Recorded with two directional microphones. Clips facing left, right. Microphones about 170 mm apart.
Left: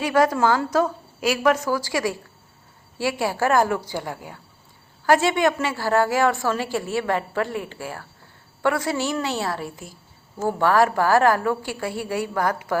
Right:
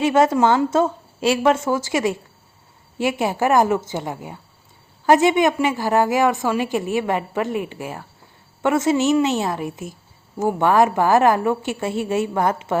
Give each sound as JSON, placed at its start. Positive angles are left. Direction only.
{"t": 0.0, "sound": "a woman's voice", "side_deg": -25}